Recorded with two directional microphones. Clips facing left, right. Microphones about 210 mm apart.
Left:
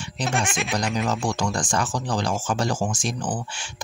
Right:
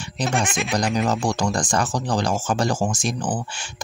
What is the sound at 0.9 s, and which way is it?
Speech, 40° right (ahead or behind).